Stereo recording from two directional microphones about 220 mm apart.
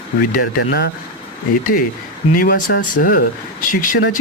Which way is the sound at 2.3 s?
40° left (ahead or behind).